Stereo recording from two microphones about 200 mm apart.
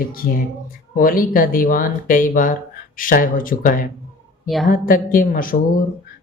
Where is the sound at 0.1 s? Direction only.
45° left (ahead or behind).